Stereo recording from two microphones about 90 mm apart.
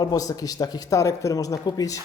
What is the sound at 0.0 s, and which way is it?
Speech, 45° left (ahead or behind).